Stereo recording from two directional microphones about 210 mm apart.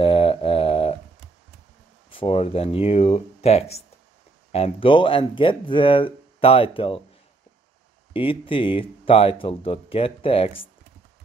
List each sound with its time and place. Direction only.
0.0 s mantra: 25° left (ahead or behind)
2.0 s speech: 25° left (ahead or behind)
8.1 s speech: 25° left (ahead or behind)